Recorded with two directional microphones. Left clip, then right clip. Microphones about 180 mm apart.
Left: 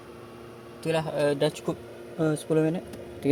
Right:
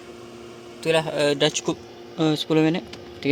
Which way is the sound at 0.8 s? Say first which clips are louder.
Right 5 dB; 10° right (ahead or behind).